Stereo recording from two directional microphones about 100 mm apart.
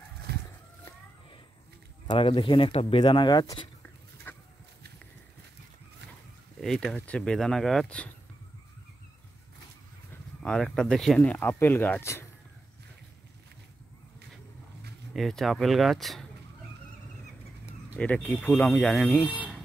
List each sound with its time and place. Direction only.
2.1 s speech: 60° left (ahead or behind); by 3.0 s 80° left
3.0 s speech: 50° left (ahead or behind)
4.3 s a sound: 20° left (ahead or behind)
6.6 s speech: 5° left (ahead or behind)
10.4 s speech: 5° left (ahead or behind)
11.1 s speech: 20° left (ahead or behind)
15.1 s speech: centre (ahead or behind)
17.9 s speech: 15° left (ahead or behind)
19.2 s speech: 15° right (ahead or behind)